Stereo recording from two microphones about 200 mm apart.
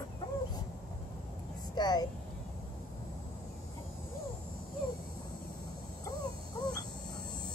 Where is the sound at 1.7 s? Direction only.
20° left (ahead or behind).